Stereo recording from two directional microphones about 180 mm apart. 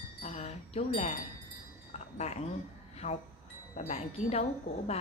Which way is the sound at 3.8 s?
35° left (ahead or behind).